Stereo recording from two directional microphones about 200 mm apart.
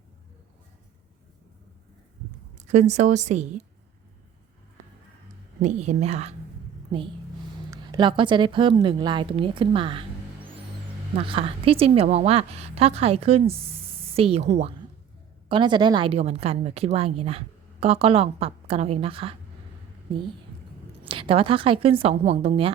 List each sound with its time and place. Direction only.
2.6 s a woman's voice: 35° right (ahead or behind)
5.5 s a woman's voice: 35° right (ahead or behind)
7.7 s a woman's voice: 20° right (ahead or behind)
21.0 s a woman's voice: 25° right (ahead or behind)